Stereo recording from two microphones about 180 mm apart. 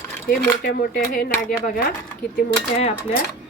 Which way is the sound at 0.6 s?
55° left (ahead or behind).